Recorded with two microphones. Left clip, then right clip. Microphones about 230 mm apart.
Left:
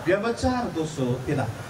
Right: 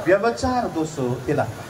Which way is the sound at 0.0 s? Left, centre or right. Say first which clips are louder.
Right 5 dB; right.